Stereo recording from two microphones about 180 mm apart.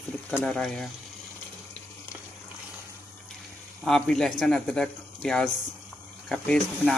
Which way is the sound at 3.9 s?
5° left (ahead or behind).